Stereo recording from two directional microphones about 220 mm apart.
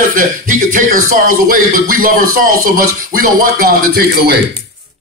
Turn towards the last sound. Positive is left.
turn(degrees=-45)  # may be behind; listen again after turning